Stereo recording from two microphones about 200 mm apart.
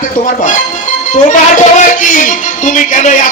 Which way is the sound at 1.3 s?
40° left (ahead or behind).